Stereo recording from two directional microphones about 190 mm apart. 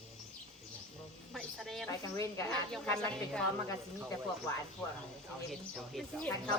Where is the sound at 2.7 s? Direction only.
5° left (ahead or behind).